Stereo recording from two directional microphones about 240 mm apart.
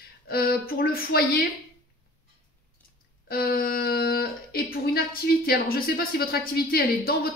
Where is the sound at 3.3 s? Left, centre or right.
Left.